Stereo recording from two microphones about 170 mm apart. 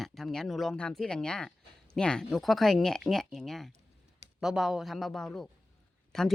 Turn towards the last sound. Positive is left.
turn(degrees=5)  # may be behind; listen again after turning